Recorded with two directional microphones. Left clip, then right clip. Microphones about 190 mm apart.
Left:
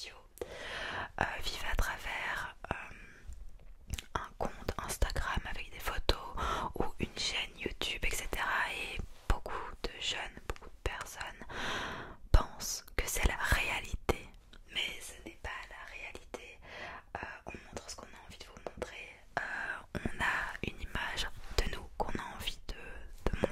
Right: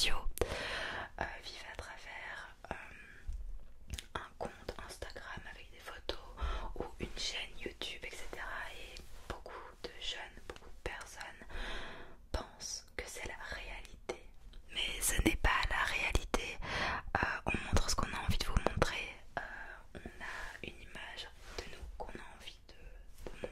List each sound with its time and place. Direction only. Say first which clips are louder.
0.4 s whispering: right 4 dB; 40° right (ahead or behind)
0.8 s whispering: left 2 dB; 15° left (ahead or behind)
1.1 s whispering: left 7 dB; 40° left (ahead or behind)
7.0 s whispering: left 2 dB; 35° left (ahead or behind); by 14.1 s 65° left (ahead or behind)
15.4 s whispering: right 8 dB; 50° right (ahead or behind)
19.5 s whispering: left 10 dB; 30° left (ahead or behind)
19.9 s whispering: left 14 dB; 55° left (ahead or behind); by 22.8 s 70° left (ahead or behind)
23.2 s a sound: left 11 dB; 90° left